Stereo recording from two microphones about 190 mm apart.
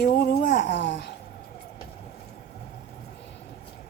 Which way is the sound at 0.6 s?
65° left (ahead or behind).